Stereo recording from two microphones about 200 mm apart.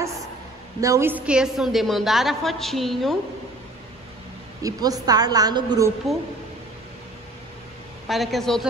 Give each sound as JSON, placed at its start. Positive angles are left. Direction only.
{"t": 0.7, "sound": "a woman's voice", "side_deg": -15}
{"t": 4.6, "sound": "a woman's voice", "side_deg": -20}
{"t": 8.1, "sound": "a woman's voice", "side_deg": 0}